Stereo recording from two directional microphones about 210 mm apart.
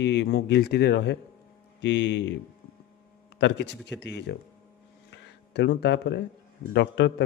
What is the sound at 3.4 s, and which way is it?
Speech, 55° left (ahead or behind).